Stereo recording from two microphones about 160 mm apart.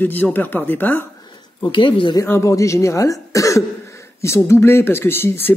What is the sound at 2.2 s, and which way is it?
Speech, 20° left (ahead or behind).